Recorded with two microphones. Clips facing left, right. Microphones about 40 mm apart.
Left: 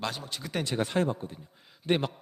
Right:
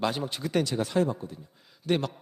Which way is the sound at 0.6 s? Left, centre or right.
Left.